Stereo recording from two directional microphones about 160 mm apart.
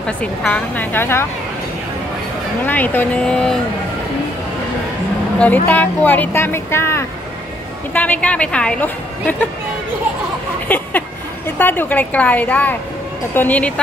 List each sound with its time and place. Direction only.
0.0 s speech: 5° left (ahead or behind)
2.6 s speech: 10° left (ahead or behind)
5.4 s speech: 10° left (ahead or behind)
10.7 s a sound: 10° left (ahead or behind)
11.5 s speech: 10° left (ahead or behind)